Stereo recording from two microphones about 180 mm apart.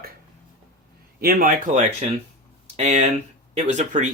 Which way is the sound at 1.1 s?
55° right (ahead or behind).